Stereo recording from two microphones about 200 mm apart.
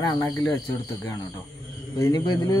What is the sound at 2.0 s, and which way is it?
Speech, 20° left (ahead or behind).